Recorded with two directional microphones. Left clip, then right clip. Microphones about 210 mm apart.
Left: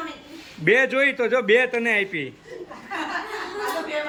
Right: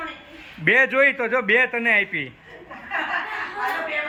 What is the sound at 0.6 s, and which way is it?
A man's voice, 15° left (ahead or behind).